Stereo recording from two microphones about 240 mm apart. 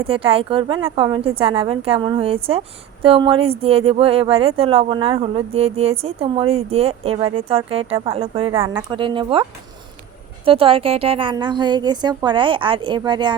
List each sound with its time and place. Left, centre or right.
0.1 s speech: right